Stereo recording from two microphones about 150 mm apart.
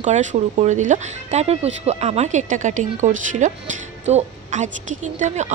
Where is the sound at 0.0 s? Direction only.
55° right (ahead or behind).